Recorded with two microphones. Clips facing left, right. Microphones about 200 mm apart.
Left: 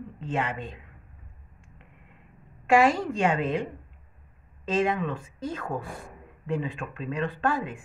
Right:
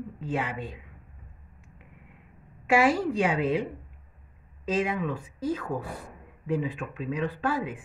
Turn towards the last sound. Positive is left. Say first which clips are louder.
# left 1 dB
turn(degrees=-5)  # may be behind; listen again after turning